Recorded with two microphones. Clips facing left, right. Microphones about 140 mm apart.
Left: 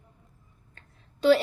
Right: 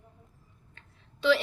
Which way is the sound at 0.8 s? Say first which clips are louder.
Left 6 dB; 40° left (ahead or behind).